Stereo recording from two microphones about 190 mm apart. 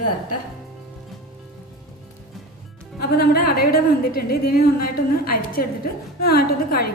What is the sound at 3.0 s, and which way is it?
A woman's voice, 55° left (ahead or behind).